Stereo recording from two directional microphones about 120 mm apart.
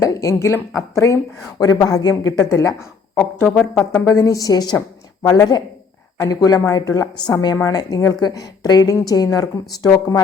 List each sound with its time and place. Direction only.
0.0 s speech: 25° left (ahead or behind)
3.4 s speech: 5° left (ahead or behind)
3.9 s a woman's voice: 25° left (ahead or behind)